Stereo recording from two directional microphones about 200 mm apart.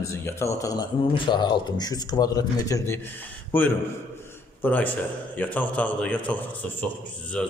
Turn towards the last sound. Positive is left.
turn(degrees=5)  # may be behind; listen again after turning